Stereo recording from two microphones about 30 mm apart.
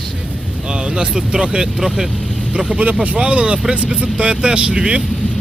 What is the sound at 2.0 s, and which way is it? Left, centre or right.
Speech, right.